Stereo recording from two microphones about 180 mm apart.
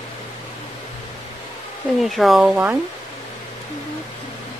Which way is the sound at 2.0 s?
Centre (ahead or behind).